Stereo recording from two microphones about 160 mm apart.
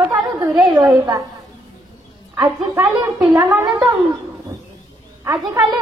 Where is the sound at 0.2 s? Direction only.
25° right (ahead or behind).